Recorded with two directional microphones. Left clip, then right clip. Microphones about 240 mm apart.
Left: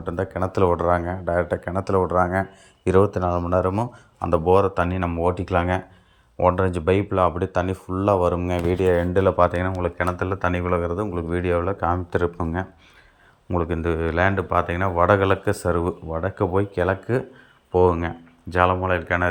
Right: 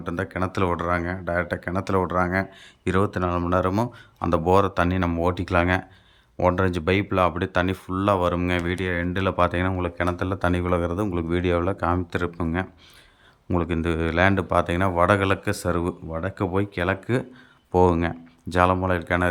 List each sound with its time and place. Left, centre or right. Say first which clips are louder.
0.0 s speech: left 2 dB; centre